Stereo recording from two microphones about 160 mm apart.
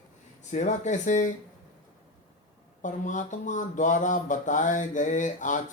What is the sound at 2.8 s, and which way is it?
Speech, 50° left (ahead or behind).